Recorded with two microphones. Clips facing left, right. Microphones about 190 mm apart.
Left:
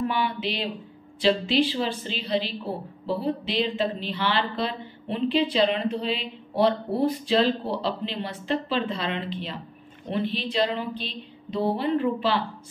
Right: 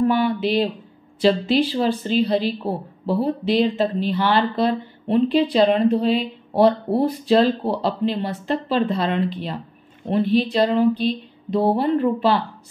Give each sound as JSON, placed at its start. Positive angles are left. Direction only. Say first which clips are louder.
{"t": 0.0, "sound": "a woman's voice", "louder": "right 8 dB", "side_deg": -50}